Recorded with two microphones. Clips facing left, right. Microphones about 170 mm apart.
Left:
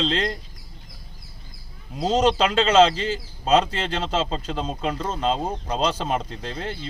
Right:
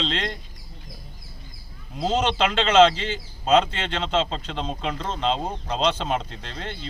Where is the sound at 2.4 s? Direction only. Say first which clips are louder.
Right 3 dB; centre (ahead or behind).